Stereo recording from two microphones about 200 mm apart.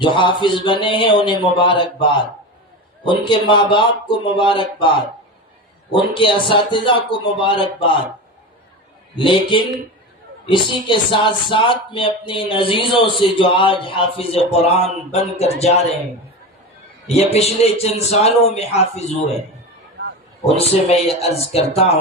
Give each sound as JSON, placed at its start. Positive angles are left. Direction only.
{"t": 0.0, "sound": "a man's voice", "side_deg": 25}
{"t": 5.9, "sound": "a man's voice", "side_deg": 25}
{"t": 9.1, "sound": "a man's voice", "side_deg": 25}
{"t": 10.8, "sound": "a man's voice", "side_deg": 25}
{"t": 17.3, "sound": "a man's voice", "side_deg": 30}
{"t": 20.4, "sound": "a man's voice", "side_deg": 30}